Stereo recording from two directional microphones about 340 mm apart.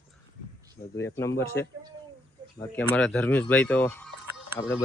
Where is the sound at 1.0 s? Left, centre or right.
Centre.